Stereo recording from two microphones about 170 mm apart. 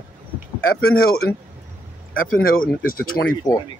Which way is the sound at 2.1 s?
55° left (ahead or behind).